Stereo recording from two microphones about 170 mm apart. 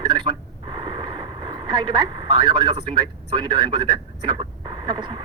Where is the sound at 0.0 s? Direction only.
25° right (ahead or behind).